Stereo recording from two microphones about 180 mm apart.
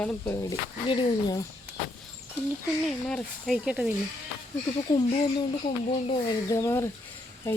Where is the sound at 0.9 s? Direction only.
25° left (ahead or behind).